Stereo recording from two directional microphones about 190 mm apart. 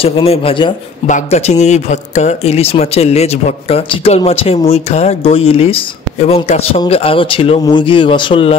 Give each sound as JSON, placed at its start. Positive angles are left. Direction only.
{"t": 0.0, "sound": "a man's voice", "side_deg": 30}